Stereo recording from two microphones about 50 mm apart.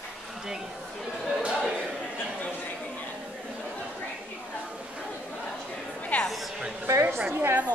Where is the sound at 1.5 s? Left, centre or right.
Centre.